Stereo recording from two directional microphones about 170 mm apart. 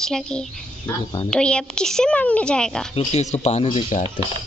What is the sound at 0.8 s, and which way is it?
Speech, 25° left (ahead or behind).